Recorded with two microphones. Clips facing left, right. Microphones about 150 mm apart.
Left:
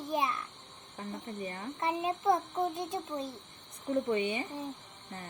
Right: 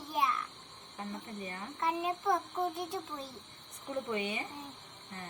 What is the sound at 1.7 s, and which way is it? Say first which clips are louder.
A child's voice: left 1 dB; 25° left (ahead or behind).